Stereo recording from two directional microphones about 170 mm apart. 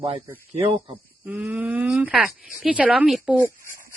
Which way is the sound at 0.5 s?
40° right (ahead or behind).